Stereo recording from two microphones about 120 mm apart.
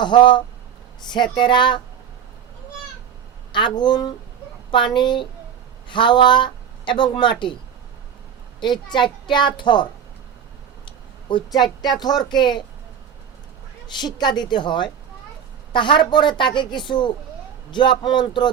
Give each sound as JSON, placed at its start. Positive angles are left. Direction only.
{"t": 0.0, "sound": "a woman's voice", "side_deg": 40}
{"t": 3.5, "sound": "a woman's voice", "side_deg": 40}
{"t": 8.6, "sound": "a woman's voice", "side_deg": 40}
{"t": 10.8, "sound": "speech", "side_deg": 40}
{"t": 14.0, "sound": "a woman's voice", "side_deg": 35}